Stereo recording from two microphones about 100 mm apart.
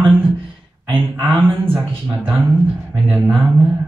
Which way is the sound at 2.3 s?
10° right (ahead or behind).